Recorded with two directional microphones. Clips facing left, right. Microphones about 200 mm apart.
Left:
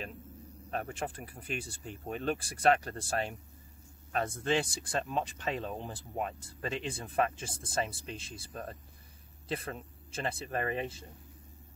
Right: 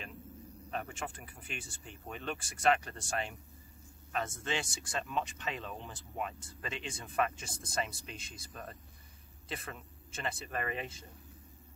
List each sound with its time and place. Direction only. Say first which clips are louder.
0.7 s speech: left 4 dB; 40° left (ahead or behind)